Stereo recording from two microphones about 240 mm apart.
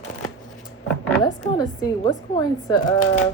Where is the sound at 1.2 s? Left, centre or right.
Centre.